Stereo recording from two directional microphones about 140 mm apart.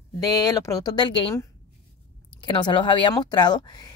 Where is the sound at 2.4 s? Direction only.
35° left (ahead or behind).